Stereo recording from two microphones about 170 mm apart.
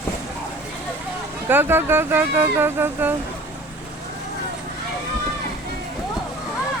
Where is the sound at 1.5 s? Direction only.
15° right (ahead or behind).